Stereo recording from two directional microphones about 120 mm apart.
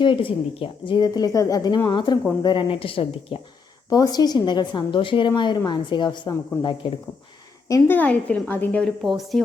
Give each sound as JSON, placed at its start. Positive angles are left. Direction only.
{"t": 0.0, "sound": "a woman's voice", "side_deg": 45}
{"t": 3.8, "sound": "a woman's voice", "side_deg": 30}
{"t": 7.7, "sound": "a woman's voice", "side_deg": 15}
{"t": 8.8, "sound": "speech", "side_deg": 0}